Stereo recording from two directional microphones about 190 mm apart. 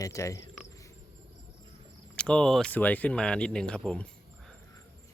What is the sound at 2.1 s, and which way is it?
Speech, 5° left (ahead or behind).